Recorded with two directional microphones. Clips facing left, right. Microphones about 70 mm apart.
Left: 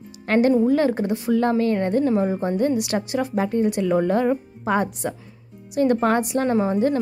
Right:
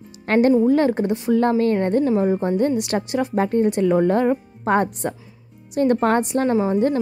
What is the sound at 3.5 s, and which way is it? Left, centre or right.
A woman's voice, right.